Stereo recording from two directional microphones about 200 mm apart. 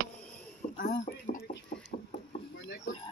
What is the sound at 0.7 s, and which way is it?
Speech, 45° left (ahead or behind).